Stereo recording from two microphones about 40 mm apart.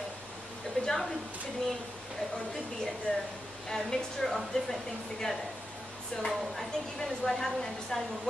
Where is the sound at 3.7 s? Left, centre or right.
Centre.